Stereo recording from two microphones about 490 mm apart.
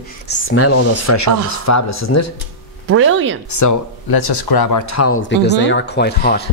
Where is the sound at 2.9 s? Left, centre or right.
Right.